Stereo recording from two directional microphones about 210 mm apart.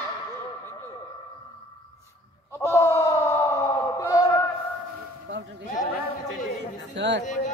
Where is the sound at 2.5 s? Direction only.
10° left (ahead or behind).